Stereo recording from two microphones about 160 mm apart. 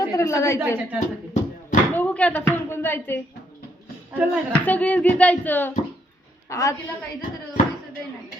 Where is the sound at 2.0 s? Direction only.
10° left (ahead or behind).